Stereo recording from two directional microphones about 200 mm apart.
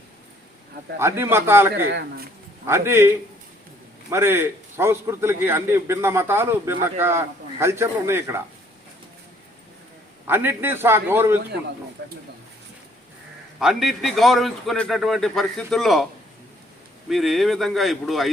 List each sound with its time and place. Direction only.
0.9 s a man's voice: 15° right (ahead or behind)
1.7 s speech: 55° right (ahead or behind)
2.6 s a man's voice: 15° right (ahead or behind)
10.2 s a man's voice: 10° right (ahead or behind)
13.6 s a man's voice: centre (ahead or behind)
17.1 s a man's voice: centre (ahead or behind)